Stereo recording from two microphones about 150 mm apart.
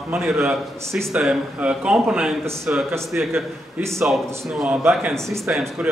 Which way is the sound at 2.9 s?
Centre (ahead or behind).